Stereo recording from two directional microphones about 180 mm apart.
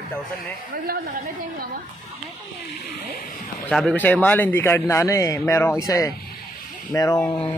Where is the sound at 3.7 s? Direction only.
5° left (ahead or behind).